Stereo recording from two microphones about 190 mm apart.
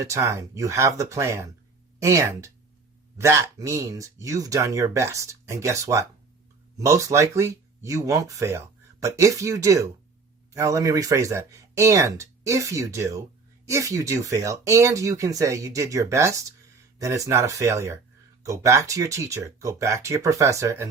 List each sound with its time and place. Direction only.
0.0 s speech: 15° right (ahead or behind)